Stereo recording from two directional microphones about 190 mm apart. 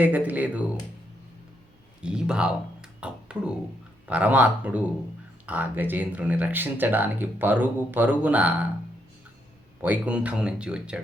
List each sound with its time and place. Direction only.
0.0 s speech: 10° right (ahead or behind)
2.0 s speech: 5° right (ahead or behind)
9.8 s speech: 5° right (ahead or behind)